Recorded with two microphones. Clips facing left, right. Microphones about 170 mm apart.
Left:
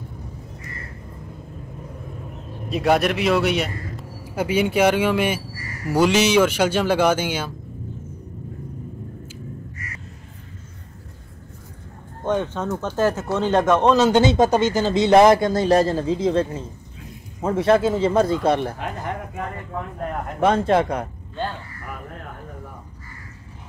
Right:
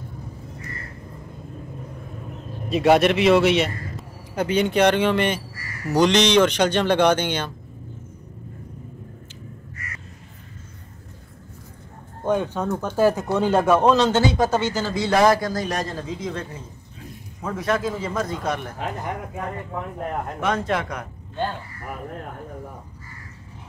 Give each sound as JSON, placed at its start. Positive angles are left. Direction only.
{"t": 2.7, "sound": "a man's voice", "side_deg": 0}
{"t": 12.3, "sound": "speech", "side_deg": -10}
{"t": 13.9, "sound": "speech", "side_deg": 10}
{"t": 14.2, "sound": "a man's voice", "side_deg": 20}
{"t": 20.3, "sound": "speech", "side_deg": 30}